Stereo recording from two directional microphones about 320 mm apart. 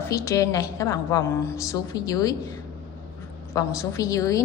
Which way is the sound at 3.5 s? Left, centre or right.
Centre.